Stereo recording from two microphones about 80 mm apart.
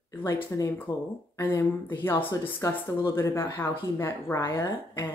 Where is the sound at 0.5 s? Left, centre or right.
Left.